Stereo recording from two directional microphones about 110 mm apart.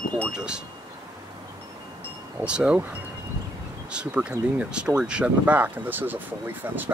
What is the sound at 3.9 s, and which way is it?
Wind chime, 10° right (ahead or behind).